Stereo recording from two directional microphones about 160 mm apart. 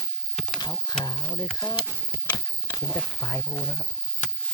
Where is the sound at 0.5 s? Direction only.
25° left (ahead or behind).